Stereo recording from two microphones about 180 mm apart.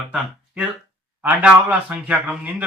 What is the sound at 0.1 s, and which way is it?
A man's voice, 5° right (ahead or behind).